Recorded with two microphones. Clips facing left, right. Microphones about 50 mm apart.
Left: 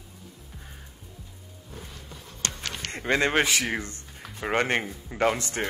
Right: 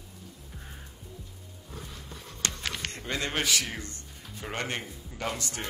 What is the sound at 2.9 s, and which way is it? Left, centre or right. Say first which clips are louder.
Speech: left 11 dB; left.